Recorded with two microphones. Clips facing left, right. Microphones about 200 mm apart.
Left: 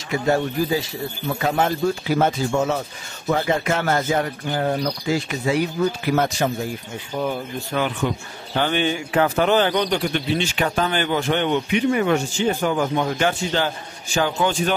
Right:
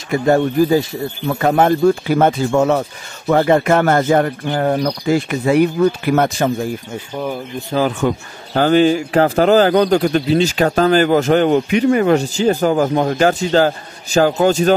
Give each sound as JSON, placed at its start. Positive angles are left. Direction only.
{"t": 0.1, "sound": "speech", "side_deg": -50}
{"t": 7.7, "sound": "a man's voice", "side_deg": -35}